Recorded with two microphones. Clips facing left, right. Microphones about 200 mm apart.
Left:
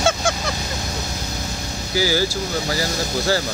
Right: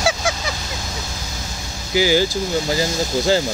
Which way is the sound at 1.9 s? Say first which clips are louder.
Right 4 dB; 20° right (ahead or behind).